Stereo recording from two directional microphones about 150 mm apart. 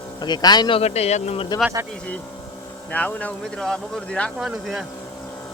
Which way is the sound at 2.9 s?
10° left (ahead or behind).